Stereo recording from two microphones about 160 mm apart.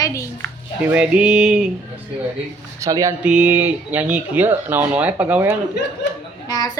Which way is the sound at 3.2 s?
10° right (ahead or behind).